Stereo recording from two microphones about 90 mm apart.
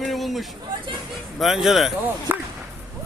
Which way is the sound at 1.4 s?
5° right (ahead or behind).